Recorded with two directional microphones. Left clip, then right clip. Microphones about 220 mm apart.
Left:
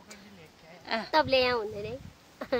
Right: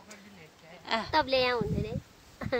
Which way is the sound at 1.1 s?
15° left (ahead or behind).